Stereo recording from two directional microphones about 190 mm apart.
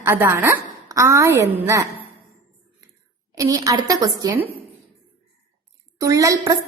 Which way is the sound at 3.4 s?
20° right (ahead or behind).